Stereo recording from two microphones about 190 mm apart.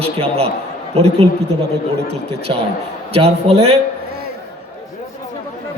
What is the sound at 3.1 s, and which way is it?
Speech, 30° right (ahead or behind).